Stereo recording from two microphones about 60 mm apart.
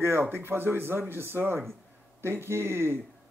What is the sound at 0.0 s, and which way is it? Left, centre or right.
Speech, right.